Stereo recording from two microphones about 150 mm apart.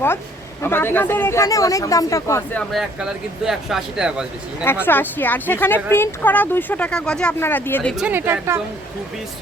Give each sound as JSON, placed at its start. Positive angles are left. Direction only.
{"t": 0.6, "sound": "speech", "side_deg": 15}
{"t": 2.6, "sound": "speech", "side_deg": 0}
{"t": 4.6, "sound": "speech", "side_deg": 15}
{"t": 8.0, "sound": "a woman's voice", "side_deg": -15}